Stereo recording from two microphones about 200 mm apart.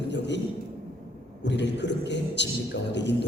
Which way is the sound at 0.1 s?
60° left (ahead or behind).